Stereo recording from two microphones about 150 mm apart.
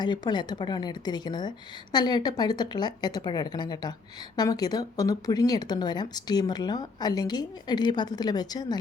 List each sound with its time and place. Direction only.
0.0 s speech: 30° left (ahead or behind)